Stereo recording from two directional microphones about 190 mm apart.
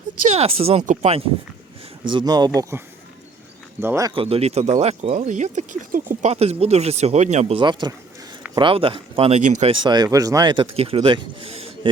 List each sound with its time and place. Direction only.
0.3 s speech: 30° right (ahead or behind)
2.0 s speech: 25° right (ahead or behind)
4.1 s speech: 30° right (ahead or behind)
9.8 s speech: 20° right (ahead or behind)